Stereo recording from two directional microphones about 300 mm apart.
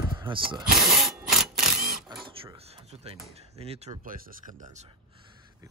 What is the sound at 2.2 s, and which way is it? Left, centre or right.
Mechanisms, centre.